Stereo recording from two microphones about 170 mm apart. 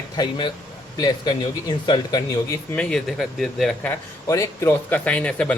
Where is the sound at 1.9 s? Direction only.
20° left (ahead or behind).